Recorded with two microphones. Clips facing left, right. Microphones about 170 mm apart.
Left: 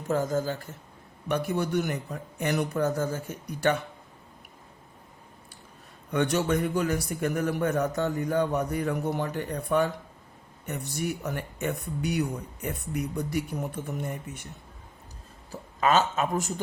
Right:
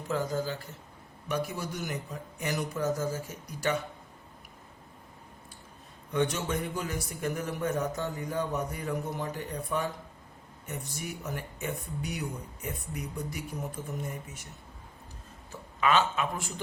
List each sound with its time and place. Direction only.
0.1 s a woman's voice: 45° left (ahead or behind)
1.3 s speech: 60° left (ahead or behind)
6.1 s a man's voice: 70° left (ahead or behind)
15.8 s speech: 40° left (ahead or behind)